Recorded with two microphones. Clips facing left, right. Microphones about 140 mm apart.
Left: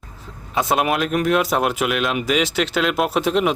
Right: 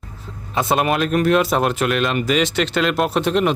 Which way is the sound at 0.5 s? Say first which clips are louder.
Right 1 dB; 5° left (ahead or behind).